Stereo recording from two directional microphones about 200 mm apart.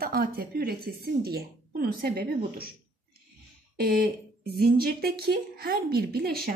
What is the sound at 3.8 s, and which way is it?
A woman's voice, 50° right (ahead or behind).